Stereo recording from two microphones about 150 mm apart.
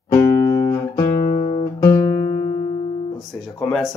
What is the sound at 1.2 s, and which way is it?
Guitar, 65° left (ahead or behind).